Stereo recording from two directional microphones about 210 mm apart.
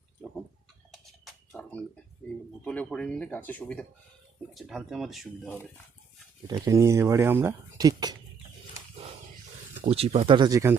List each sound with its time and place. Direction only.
0.2 s a sound: 5° left (ahead or behind)
2.6 s speech: 5° left (ahead or behind)
6.5 s speech: 15° right (ahead or behind)
9.8 s speech: 30° right (ahead or behind)